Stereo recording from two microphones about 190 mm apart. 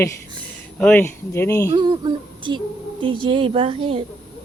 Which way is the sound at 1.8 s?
25° right (ahead or behind).